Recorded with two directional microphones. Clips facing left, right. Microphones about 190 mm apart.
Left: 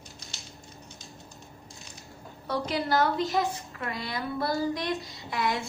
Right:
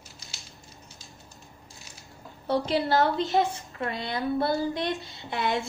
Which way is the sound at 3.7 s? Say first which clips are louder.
Right 3 dB; 25° right (ahead or behind).